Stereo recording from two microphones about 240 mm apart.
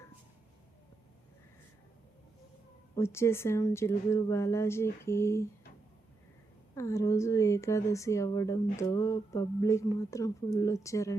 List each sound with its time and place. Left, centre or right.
2.9 s a woman's voice: centre
6.7 s a woman's voice: centre